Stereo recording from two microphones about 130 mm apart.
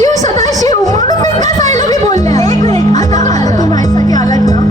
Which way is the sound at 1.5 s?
65° right (ahead or behind).